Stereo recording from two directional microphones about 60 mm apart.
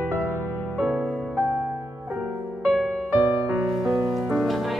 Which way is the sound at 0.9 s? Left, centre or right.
Centre.